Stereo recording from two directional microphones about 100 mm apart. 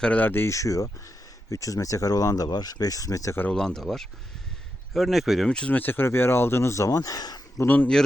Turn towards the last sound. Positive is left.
turn(degrees=20)  # may be behind; listen again after turning